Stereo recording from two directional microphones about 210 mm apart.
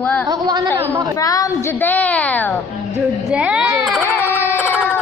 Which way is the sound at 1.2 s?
15° left (ahead or behind).